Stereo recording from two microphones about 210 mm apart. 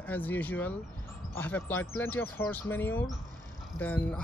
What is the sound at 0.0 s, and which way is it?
Speech, 10° left (ahead or behind).